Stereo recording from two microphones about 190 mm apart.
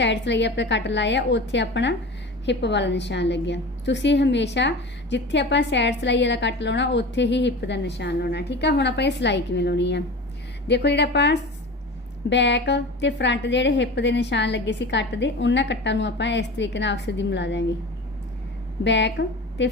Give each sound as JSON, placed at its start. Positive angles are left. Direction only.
{"t": 0.0, "sound": "a woman's voice", "side_deg": 65}
{"t": 18.9, "sound": "a woman's voice", "side_deg": 65}